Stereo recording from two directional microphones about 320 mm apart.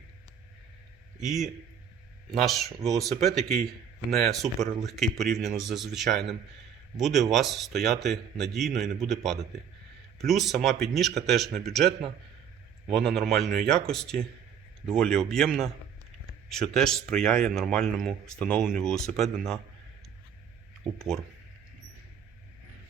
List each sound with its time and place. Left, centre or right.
1.2 s a man's voice: centre
21.0 s a man's voice: centre